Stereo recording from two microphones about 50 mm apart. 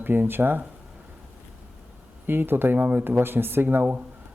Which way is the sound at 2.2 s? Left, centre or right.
Right.